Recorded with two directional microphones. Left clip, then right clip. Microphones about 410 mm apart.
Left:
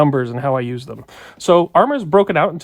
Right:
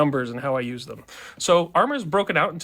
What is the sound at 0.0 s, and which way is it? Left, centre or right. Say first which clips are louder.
Speech: left 6 dB; left.